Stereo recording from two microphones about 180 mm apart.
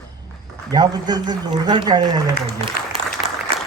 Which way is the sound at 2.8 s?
55° left (ahead or behind).